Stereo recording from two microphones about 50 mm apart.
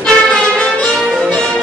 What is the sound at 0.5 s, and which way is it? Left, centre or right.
Music, left.